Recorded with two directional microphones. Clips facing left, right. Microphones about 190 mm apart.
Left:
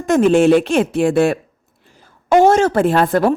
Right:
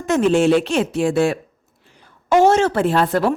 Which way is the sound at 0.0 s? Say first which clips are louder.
Left 4 dB; 50° left (ahead or behind).